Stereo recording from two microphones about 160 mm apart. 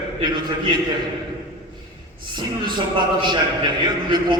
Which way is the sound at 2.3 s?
30° right (ahead or behind).